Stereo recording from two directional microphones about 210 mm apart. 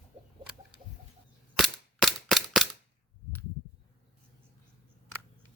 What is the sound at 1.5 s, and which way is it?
Cap gun, centre (ahead or behind).